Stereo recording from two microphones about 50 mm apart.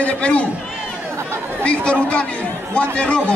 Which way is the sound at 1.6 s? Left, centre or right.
Left.